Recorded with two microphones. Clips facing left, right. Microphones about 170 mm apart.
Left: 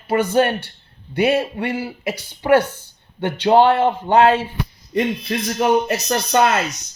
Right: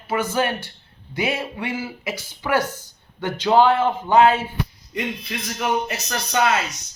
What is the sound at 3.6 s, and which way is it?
Speech, 60° left (ahead or behind).